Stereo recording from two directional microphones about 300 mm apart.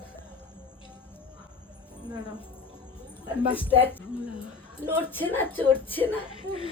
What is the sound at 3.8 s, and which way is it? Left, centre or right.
Speech, centre.